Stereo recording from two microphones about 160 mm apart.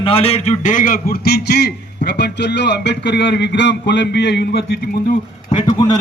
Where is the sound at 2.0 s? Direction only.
90° left.